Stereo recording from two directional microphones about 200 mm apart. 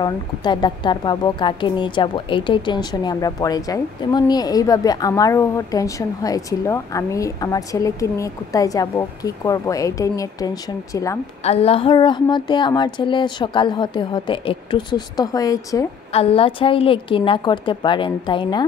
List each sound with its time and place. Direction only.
0.0 s a woman's voice: 20° left (ahead or behind)
11.4 s speech: 30° left (ahead or behind)
16.1 s speech: 30° left (ahead or behind)